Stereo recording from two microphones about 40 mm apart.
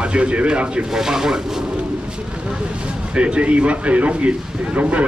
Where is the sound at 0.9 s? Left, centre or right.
Centre.